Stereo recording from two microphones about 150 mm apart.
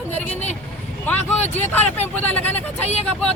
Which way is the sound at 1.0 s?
10° left (ahead or behind).